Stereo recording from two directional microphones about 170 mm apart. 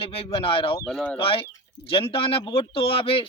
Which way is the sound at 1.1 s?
30° left (ahead or behind).